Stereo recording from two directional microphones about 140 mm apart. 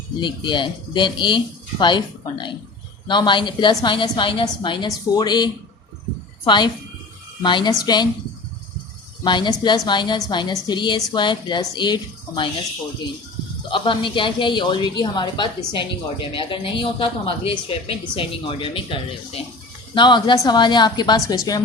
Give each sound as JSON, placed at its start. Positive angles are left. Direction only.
{"t": 0.2, "sound": "a woman's voice", "side_deg": 35}
{"t": 9.2, "sound": "a woman's voice", "side_deg": 35}
{"t": 13.7, "sound": "a woman's voice", "side_deg": 35}